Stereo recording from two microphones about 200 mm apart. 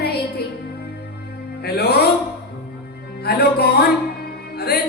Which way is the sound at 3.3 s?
50° left (ahead or behind).